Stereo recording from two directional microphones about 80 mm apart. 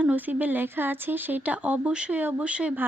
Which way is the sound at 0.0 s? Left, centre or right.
Centre.